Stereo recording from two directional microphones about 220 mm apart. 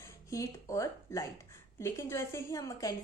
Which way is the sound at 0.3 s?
15° left (ahead or behind).